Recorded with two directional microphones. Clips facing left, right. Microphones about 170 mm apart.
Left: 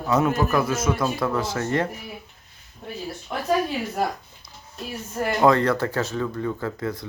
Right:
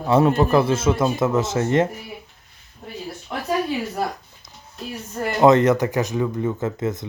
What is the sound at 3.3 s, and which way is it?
Speech, centre (ahead or behind).